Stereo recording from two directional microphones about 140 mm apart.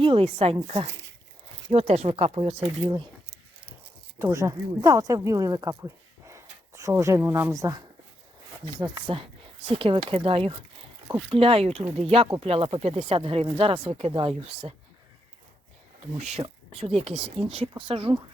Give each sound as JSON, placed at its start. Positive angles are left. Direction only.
{"t": 0.0, "sound": "speech", "side_deg": -40}
{"t": 1.7, "sound": "speech", "side_deg": -50}
{"t": 4.2, "sound": "speech", "side_deg": -20}
{"t": 16.1, "sound": "speech", "side_deg": -50}